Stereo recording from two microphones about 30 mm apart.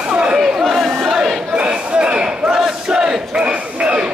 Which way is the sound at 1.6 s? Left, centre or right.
Right.